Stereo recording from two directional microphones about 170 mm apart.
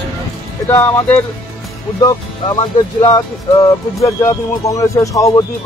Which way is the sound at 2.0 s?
25° left (ahead or behind).